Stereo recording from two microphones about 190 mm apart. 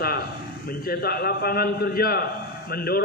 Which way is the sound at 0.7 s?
50° left (ahead or behind).